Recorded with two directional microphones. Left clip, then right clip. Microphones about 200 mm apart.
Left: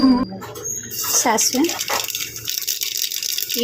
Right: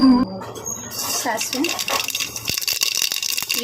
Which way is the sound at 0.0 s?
Centre (ahead or behind).